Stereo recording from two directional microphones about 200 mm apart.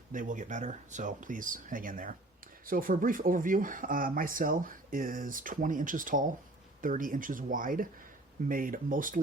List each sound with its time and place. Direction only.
0.1 s speech: 40° right (ahead or behind)